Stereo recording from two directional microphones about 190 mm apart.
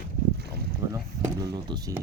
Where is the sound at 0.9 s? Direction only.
15° right (ahead or behind).